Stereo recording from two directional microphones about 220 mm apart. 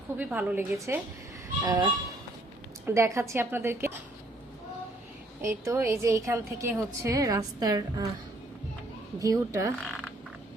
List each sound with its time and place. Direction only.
0.2 s a woman's voice: 5° right (ahead or behind)
5.4 s a woman's voice: 10° right (ahead or behind)
9.1 s a woman's voice: 15° right (ahead or behind)
9.8 s speech: 5° left (ahead or behind)